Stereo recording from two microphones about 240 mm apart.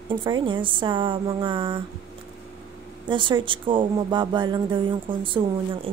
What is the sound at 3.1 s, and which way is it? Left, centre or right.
Speech, centre.